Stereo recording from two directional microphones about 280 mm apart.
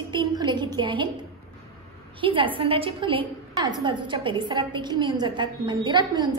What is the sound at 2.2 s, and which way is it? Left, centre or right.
A woman's voice, centre.